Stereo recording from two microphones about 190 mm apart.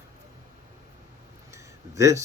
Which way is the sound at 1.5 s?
15° right (ahead or behind).